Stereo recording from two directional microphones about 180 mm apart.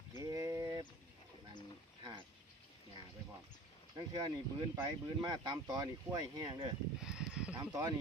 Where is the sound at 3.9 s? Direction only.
20° right (ahead or behind).